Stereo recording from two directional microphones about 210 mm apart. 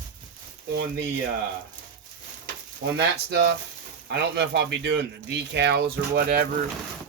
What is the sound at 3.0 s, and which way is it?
Speech, 50° right (ahead or behind).